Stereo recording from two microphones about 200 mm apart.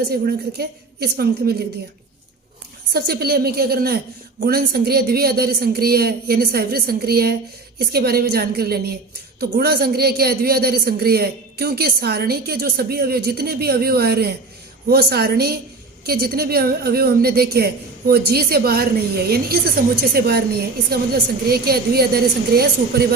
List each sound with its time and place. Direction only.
0.1 s speech: 55° right (ahead or behind)
2.9 s speech: 50° right (ahead or behind)